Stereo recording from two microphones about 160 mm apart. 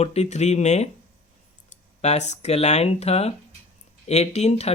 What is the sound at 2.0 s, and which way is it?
Speech, 45° left (ahead or behind).